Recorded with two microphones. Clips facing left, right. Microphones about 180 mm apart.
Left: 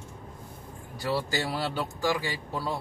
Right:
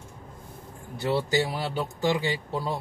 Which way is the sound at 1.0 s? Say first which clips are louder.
Right 4 dB; 20° right (ahead or behind).